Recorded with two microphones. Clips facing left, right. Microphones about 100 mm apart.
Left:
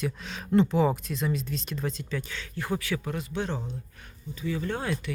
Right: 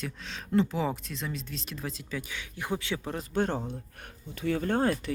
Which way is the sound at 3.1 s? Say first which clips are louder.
Right 2 dB; 50° right (ahead or behind).